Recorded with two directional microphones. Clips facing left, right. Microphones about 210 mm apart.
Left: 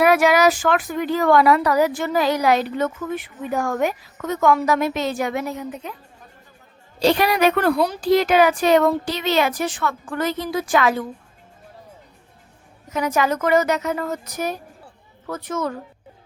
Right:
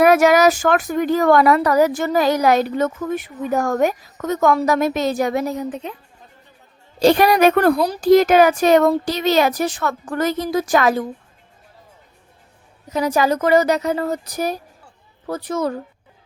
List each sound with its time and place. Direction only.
0.0 s speech: 45° right (ahead or behind)
7.0 s speech: 45° right (ahead or behind)
12.9 s speech: 35° right (ahead or behind)